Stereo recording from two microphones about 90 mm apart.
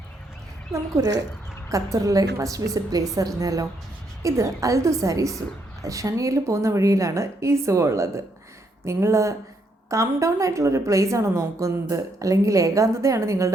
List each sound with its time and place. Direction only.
0.7 s a woman's voice: 35° right (ahead or behind)